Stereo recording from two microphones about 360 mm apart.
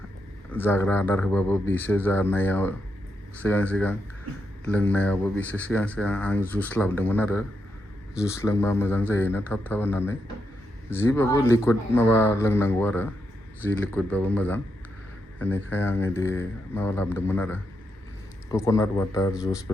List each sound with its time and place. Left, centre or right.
0.5 s speech: centre